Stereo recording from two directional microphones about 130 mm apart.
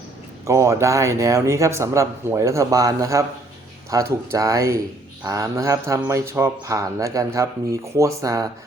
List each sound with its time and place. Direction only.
0.4 s a man's voice: 25° right (ahead or behind)